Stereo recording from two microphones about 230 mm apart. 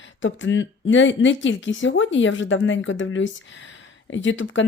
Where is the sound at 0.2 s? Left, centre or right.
Left.